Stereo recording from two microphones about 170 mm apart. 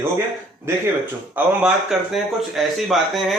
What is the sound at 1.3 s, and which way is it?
Speech, 5° right (ahead or behind).